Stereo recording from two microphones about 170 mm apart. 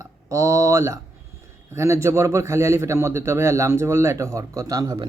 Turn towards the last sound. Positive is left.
turn(degrees=-25)  # may be behind; listen again after turning